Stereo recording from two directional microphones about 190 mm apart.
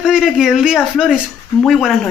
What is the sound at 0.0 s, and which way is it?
Speech, 5° right (ahead or behind).